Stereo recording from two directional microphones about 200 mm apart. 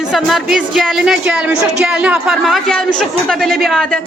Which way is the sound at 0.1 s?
Centre (ahead or behind).